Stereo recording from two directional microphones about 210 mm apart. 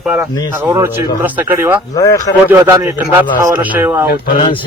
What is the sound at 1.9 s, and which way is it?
Speech, 15° left (ahead or behind).